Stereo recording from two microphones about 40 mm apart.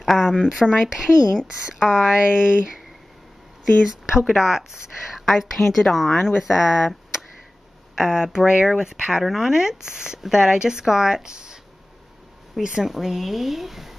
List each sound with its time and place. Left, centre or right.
0.0 s a sound: centre
0.5 s speech: centre
2.1 s speech: right
3.8 s speech: centre
5.2 s speech: centre
12.8 s speech: centre